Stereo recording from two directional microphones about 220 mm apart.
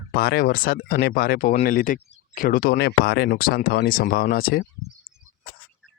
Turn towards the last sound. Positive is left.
turn(degrees=40)  # may be behind; listen again after turning